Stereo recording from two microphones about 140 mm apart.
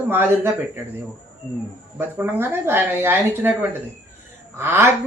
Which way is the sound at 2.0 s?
15° right (ahead or behind).